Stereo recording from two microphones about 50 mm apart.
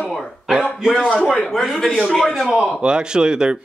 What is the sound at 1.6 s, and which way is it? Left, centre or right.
Speech, centre.